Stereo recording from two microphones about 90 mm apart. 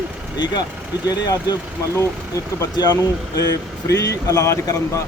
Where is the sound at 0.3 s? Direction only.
55° left (ahead or behind).